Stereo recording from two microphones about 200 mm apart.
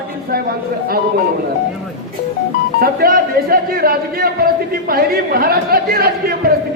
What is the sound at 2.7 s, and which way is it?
Speech, 50° right (ahead or behind).